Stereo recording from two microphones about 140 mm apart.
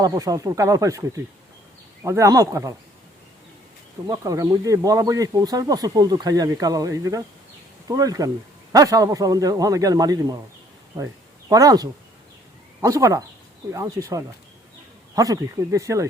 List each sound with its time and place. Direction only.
0.0 s speech: 25° right (ahead or behind)
4.0 s speech: 25° right (ahead or behind)